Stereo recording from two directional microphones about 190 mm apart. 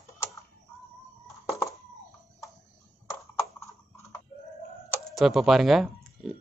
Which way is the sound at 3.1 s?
15° left (ahead or behind).